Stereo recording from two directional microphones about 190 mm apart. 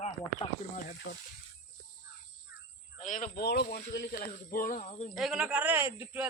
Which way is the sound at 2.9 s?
40° left (ahead or behind).